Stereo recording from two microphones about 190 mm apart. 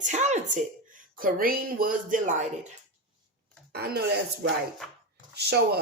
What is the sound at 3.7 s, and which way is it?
Speech, 55° right (ahead or behind).